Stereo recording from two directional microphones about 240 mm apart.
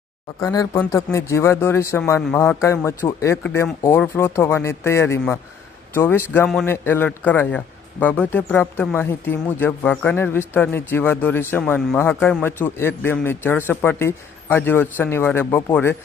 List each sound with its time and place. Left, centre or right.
0.3 s a man's voice: centre